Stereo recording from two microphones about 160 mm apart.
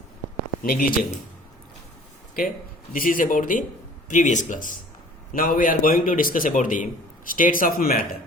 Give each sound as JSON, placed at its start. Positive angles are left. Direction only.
{"t": 0.6, "sound": "a man's voice", "side_deg": 65}
{"t": 2.9, "sound": "a man's voice", "side_deg": 60}